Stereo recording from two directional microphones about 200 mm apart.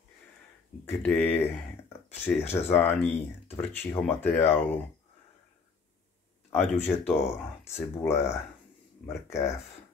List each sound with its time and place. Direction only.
0.8 s speech: 10° left (ahead or behind)
6.5 s speech: 10° left (ahead or behind)